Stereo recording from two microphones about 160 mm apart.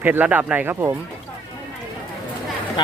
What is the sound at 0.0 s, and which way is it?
Speech, 10° right (ahead or behind).